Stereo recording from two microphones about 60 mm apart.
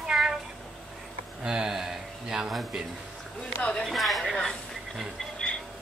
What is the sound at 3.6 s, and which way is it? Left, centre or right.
Speech, centre.